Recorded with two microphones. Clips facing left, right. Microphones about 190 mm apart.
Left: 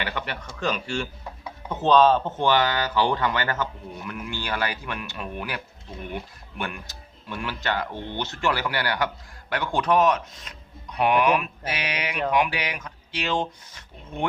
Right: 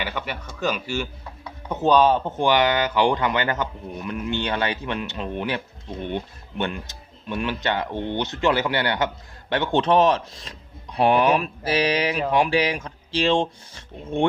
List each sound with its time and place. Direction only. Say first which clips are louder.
0.0 s speech: right 1 dB; 5° right (ahead or behind); by 14.3 s 30° right (ahead or behind)